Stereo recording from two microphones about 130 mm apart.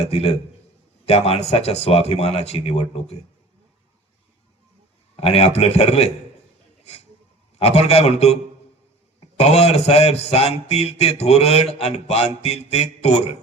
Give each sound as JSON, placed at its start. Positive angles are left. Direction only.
{"t": 0.0, "sound": "speech", "side_deg": 50}
{"t": 5.1, "sound": "speech", "side_deg": 50}
{"t": 7.6, "sound": "speech", "side_deg": 55}
{"t": 12.4, "sound": "a sound", "side_deg": 55}